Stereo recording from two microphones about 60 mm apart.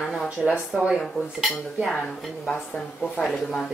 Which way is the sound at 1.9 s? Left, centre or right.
Centre.